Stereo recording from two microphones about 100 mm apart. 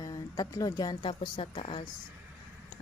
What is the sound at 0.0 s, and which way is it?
A woman's voice, 35° left (ahead or behind).